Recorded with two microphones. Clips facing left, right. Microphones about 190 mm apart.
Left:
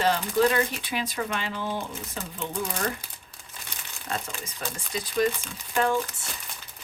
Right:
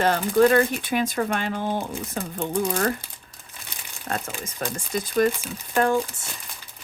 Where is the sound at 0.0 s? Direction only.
50° right (ahead or behind).